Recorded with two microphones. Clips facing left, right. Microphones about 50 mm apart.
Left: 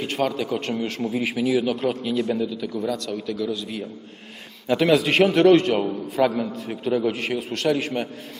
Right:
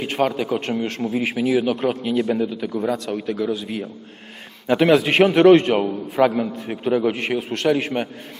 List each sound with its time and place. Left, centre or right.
0.1 s a man's voice: centre
0.6 s a man's voice: centre; by 3.5 s right
3.5 s a man's voice: right
5.5 s a man's voice: centre
7.1 s a man's voice: centre